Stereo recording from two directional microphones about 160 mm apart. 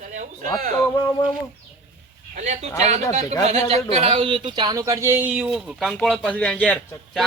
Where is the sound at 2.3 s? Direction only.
45° right (ahead or behind); by 7.2 s 10° left (ahead or behind).